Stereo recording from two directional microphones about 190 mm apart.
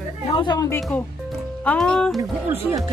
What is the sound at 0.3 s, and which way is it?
Speech, 25° left (ahead or behind).